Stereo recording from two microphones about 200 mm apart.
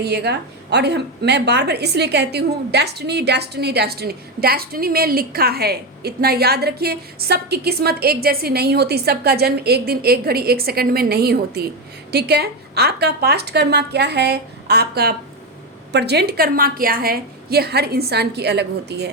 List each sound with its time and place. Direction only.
0.0 s a woman's voice: 55° right (ahead or behind)